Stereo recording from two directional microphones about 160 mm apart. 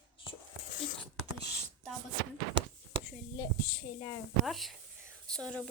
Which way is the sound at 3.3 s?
15° left (ahead or behind).